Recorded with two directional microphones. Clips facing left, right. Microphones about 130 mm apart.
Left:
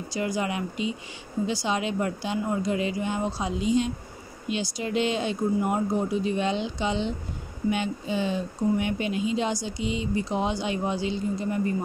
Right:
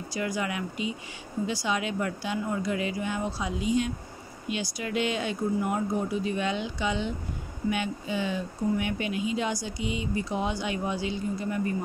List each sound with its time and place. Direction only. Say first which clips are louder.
0.1 s speech: left 3 dB; 25° left (ahead or behind)